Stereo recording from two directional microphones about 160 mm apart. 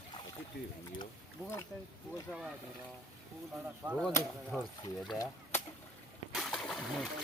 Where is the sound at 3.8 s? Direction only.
5° right (ahead or behind).